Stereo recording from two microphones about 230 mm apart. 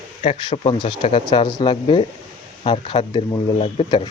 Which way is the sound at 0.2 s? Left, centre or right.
Left.